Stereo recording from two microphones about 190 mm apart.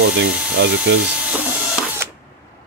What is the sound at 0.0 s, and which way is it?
Speech, 70° right (ahead or behind).